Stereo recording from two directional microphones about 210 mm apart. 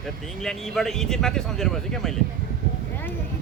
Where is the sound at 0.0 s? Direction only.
Centre (ahead or behind).